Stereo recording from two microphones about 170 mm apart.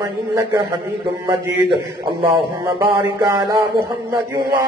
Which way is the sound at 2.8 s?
25° right (ahead or behind).